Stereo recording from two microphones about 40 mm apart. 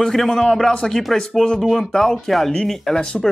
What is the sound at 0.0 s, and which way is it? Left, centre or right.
Speech, centre.